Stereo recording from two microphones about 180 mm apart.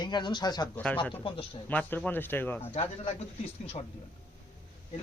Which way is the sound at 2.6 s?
35° left (ahead or behind).